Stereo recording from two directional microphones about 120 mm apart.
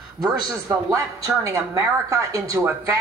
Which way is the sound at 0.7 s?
30° right (ahead or behind).